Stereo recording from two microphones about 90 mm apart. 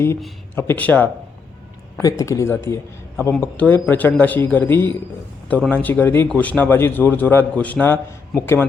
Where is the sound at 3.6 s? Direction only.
20° left (ahead or behind).